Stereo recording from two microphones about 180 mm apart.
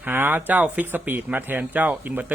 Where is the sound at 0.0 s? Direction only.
10° right (ahead or behind).